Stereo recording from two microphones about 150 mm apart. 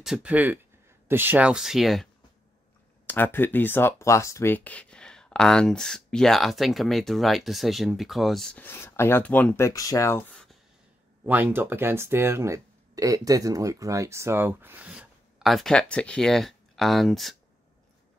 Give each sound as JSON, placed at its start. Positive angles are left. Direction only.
{"t": 0.0, "sound": "speech", "side_deg": -5}
{"t": 3.1, "sound": "speech", "side_deg": 15}
{"t": 9.7, "sound": "speech", "side_deg": 20}
{"t": 10.3, "sound": "a sound", "side_deg": 5}
{"t": 11.2, "sound": "speech", "side_deg": -10}